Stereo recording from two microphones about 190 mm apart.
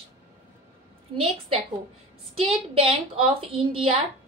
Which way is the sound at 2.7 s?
30° right (ahead or behind).